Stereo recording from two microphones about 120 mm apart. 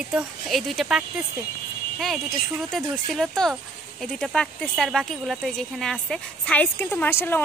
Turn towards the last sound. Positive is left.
turn(degrees=20)  # may be behind; listen again after turning